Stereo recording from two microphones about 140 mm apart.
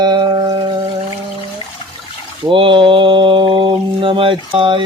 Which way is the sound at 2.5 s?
35° right (ahead or behind).